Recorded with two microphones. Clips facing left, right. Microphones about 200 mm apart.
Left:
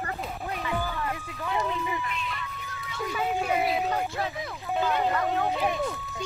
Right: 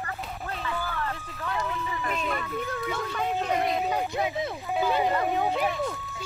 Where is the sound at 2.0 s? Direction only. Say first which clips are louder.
Right 5 dB; 45° right (ahead or behind).